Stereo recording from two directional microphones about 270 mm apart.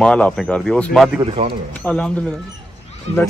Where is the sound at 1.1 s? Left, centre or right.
Right.